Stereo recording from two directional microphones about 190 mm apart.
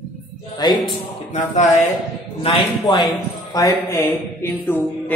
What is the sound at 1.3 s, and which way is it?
Speech, 40° left (ahead or behind).